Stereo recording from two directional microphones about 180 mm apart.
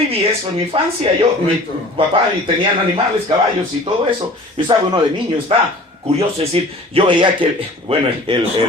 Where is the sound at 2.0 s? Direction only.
30° right (ahead or behind).